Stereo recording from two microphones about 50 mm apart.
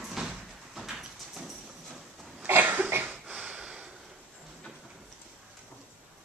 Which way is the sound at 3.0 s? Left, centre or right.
Right.